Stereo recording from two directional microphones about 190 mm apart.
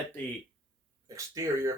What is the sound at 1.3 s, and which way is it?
Speech, 15° right (ahead or behind).